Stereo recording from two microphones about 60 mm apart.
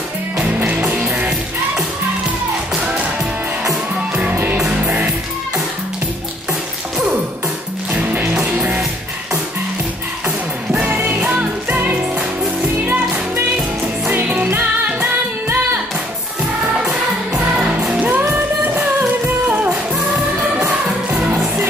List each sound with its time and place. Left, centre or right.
0.7 s music: right
4.8 s music: right
7.9 s music: right
8.5 s music: centre
10.7 s music: right
14.1 s music: right
17.6 s music: centre
18.8 s music: right
21.1 s music: right